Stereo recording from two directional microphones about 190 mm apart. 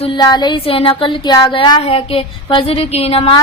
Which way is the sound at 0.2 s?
20° left (ahead or behind).